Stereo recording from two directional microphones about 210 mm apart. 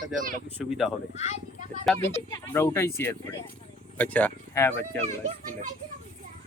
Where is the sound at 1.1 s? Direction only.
30° left (ahead or behind).